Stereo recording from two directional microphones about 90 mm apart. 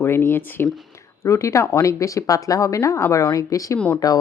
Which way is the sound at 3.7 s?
15° left (ahead or behind).